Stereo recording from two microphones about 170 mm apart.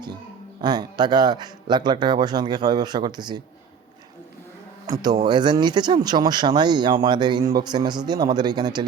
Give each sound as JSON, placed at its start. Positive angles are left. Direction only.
{"t": 0.6, "sound": "speech", "side_deg": -25}
{"t": 5.2, "sound": "speech", "side_deg": -25}